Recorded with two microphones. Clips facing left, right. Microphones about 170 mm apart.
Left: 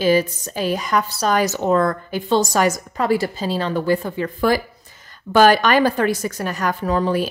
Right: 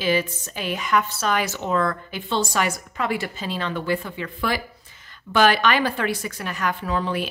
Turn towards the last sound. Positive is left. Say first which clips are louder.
# left 6 dB
turn(degrees=40)  # may be behind; listen again after turning